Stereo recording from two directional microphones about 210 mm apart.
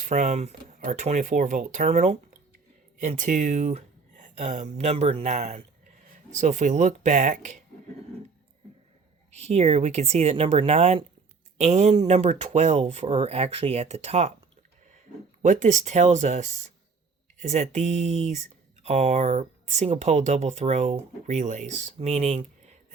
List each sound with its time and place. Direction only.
0.0 s speech: 35° right (ahead or behind)
9.3 s speech: 30° right (ahead or behind)
15.4 s speech: 35° right (ahead or behind)